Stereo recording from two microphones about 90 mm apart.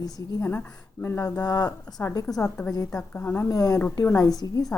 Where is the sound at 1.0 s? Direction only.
25° left (ahead or behind).